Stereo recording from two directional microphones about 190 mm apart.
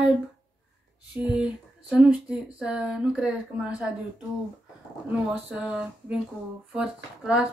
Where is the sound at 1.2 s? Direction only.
5° right (ahead or behind).